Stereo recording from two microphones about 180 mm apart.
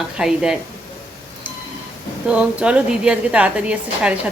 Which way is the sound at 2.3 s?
5° right (ahead or behind).